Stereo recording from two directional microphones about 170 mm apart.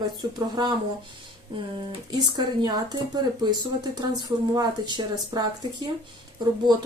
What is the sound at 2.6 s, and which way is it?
Speech, 25° right (ahead or behind).